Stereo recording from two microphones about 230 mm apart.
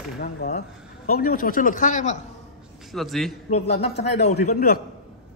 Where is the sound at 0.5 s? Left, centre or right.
Left.